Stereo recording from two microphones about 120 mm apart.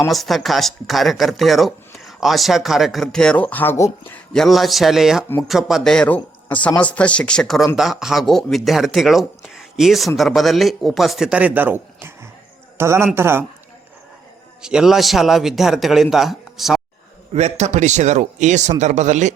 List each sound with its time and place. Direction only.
0.1 s a man's voice: centre (ahead or behind); by 13.4 s 20° right (ahead or behind)
14.6 s speech: 5° right (ahead or behind)
17.3 s speech: 65° right (ahead or behind)